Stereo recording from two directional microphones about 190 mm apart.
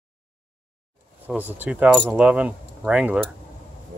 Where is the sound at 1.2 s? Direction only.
10° right (ahead or behind).